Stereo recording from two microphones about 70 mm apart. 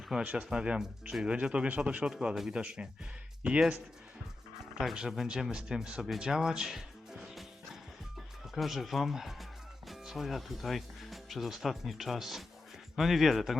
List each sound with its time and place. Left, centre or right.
0.3 s speech: centre
2.1 s speech: centre
4.8 s speech: centre
8.5 s speech: centre